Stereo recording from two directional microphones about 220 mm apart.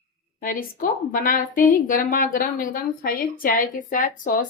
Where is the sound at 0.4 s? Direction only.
40° left (ahead or behind).